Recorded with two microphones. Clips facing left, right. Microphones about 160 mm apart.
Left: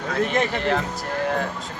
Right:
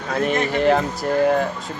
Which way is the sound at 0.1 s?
10° right (ahead or behind).